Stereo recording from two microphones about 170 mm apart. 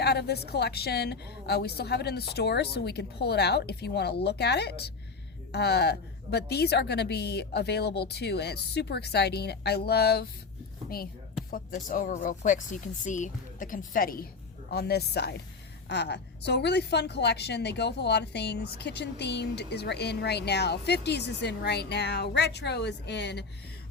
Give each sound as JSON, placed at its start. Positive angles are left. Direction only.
{"t": 0.0, "sound": "a woman's voice", "side_deg": 75}
{"t": 14.7, "sound": "a woman's voice", "side_deg": 70}
{"t": 15.9, "sound": "a woman's voice", "side_deg": 90}